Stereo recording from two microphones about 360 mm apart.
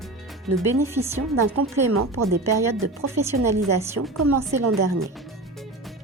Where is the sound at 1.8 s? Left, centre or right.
Right.